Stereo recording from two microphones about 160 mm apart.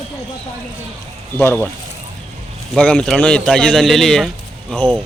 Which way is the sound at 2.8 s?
5° left (ahead or behind).